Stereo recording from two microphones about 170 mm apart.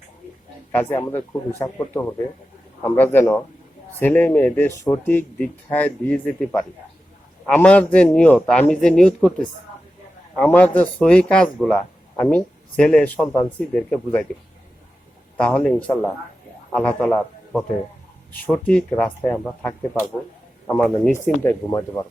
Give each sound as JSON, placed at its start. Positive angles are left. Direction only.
{"t": 0.7, "sound": "speech", "side_deg": 10}
{"t": 15.4, "sound": "a man's voice", "side_deg": 5}
{"t": 21.4, "sound": "speech", "side_deg": 15}